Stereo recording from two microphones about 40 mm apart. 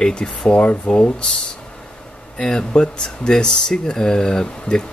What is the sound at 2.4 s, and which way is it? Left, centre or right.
Speech, centre.